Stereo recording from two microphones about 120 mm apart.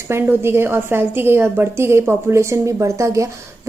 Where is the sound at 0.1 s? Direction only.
20° right (ahead or behind).